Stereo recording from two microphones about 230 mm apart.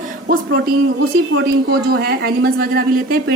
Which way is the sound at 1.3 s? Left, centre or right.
Right.